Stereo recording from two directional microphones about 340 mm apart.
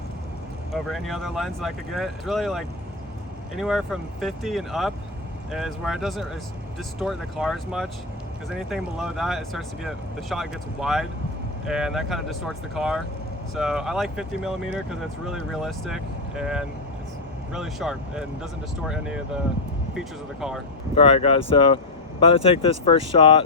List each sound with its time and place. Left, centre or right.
0.7 s speech: centre
20.9 s speech: centre